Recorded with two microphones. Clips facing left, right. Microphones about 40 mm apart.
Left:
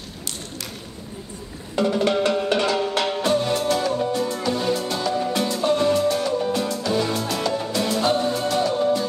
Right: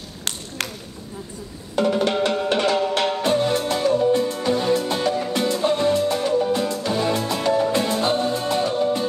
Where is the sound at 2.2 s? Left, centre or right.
Right.